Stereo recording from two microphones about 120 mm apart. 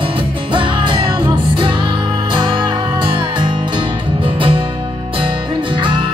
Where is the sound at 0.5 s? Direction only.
45° right (ahead or behind).